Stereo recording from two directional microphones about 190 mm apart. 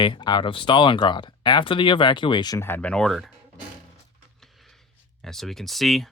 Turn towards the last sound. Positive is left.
turn(degrees=0)  # may be behind; listen again after turning